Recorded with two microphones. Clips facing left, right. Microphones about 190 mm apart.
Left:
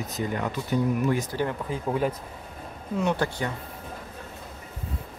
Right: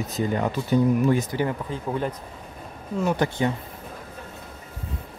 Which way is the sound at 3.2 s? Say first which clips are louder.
Right 3 dB; 20° right (ahead or behind).